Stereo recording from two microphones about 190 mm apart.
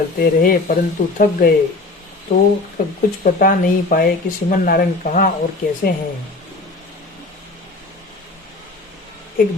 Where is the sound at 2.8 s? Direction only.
50° left (ahead or behind).